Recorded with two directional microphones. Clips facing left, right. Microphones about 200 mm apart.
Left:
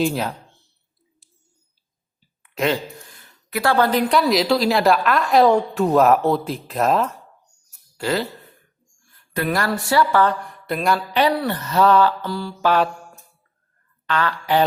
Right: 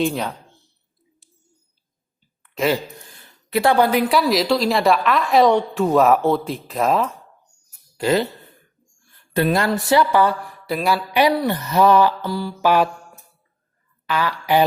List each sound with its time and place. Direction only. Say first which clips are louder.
0.0 s a woman's voice: even; centre (ahead or behind)
2.6 s a woman's voice: right 1 dB; 5° right (ahead or behind)
3.5 s a woman's voice: right 2 dB; 20° right (ahead or behind); by 7.2 s centre (ahead or behind)
7.9 s speech: right 4 dB; 20° right (ahead or behind)
9.3 s a woman's voice: right 3 dB; 25° right (ahead or behind)
14.1 s a woman's voice: right 1 dB; 10° right (ahead or behind)